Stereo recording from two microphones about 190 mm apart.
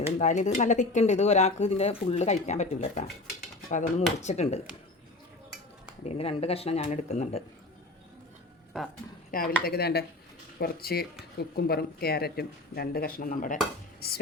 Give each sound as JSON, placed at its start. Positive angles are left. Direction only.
{"t": 0.0, "sound": "speech", "side_deg": 40}
{"t": 6.1, "sound": "speech", "side_deg": 30}
{"t": 9.3, "sound": "speech", "side_deg": 50}